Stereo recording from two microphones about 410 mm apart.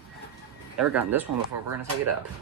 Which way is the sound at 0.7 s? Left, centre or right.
Centre.